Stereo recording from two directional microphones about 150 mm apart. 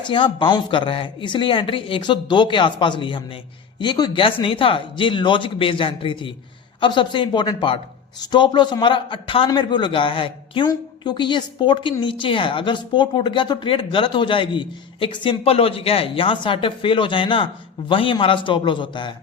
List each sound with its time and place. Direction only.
0.1 s a woman's voice: 35° left (ahead or behind)